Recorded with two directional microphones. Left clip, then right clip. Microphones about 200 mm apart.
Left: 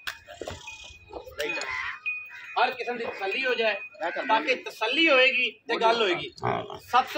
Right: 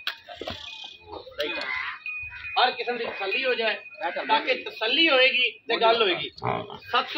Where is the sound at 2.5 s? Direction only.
25° left (ahead or behind).